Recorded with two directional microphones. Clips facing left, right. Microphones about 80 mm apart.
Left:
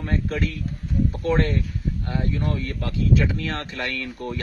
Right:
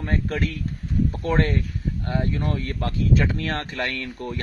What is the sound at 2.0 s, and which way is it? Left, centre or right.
Speech, right.